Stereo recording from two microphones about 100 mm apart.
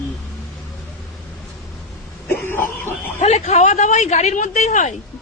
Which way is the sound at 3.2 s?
90° left.